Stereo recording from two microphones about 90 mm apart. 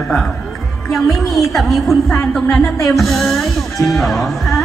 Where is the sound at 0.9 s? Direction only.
Centre (ahead or behind).